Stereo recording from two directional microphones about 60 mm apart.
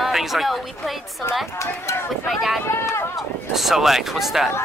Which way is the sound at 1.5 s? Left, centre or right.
Left.